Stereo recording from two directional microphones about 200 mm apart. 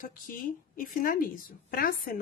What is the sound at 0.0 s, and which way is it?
A woman's voice, 45° left (ahead or behind).